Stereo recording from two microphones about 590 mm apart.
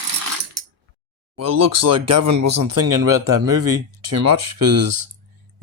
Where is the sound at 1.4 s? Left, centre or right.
Right.